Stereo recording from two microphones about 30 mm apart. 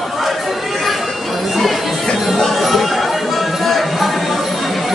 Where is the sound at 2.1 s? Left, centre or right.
Centre.